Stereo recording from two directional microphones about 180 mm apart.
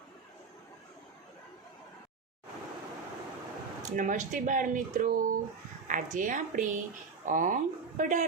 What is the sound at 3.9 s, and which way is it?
A woman's voice, 45° right (ahead or behind).